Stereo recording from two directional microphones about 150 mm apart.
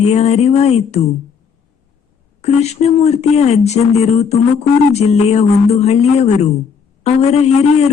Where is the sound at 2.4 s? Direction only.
45° left (ahead or behind).